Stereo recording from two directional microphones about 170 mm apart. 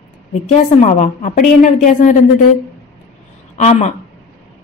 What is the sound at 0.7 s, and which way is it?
A woman's voice, 45° left (ahead or behind).